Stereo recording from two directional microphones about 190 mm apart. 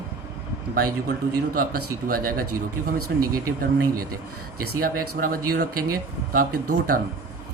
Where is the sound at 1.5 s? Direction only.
50° right (ahead or behind).